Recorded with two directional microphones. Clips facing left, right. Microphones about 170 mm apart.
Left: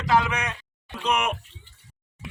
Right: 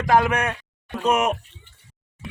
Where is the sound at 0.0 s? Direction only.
50° right (ahead or behind).